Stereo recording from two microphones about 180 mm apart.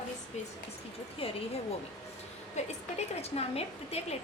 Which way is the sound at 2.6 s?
40° left (ahead or behind).